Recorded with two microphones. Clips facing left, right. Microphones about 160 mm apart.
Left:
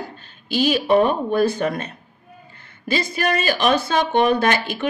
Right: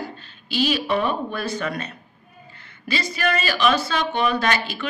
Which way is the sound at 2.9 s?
45° left (ahead or behind).